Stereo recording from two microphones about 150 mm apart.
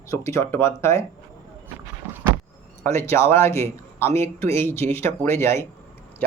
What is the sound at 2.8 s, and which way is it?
Speech, 15° left (ahead or behind).